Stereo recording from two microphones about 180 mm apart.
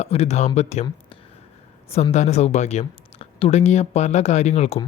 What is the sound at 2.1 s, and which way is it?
Speech, 40° left (ahead or behind).